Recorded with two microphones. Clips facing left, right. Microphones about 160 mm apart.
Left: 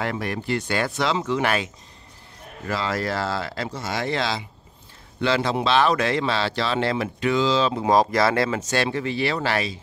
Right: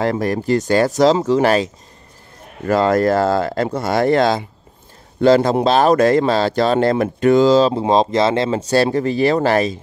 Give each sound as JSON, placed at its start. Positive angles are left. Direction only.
{"t": 0.0, "sound": "speech", "side_deg": -40}
{"t": 2.6, "sound": "speech", "side_deg": -50}
{"t": 7.7, "sound": "speech", "side_deg": -25}